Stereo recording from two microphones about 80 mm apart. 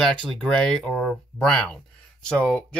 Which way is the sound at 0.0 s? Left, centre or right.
Centre.